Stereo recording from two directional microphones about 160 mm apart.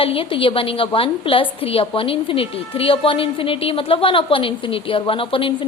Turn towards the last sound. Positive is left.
turn(degrees=35)  # may be behind; listen again after turning